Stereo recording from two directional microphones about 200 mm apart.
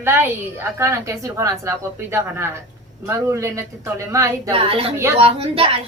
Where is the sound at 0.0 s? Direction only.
10° right (ahead or behind).